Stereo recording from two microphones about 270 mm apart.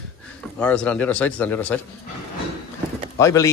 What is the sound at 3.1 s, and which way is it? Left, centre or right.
Speech, centre.